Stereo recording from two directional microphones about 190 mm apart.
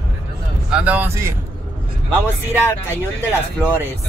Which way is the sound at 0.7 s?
10° right (ahead or behind).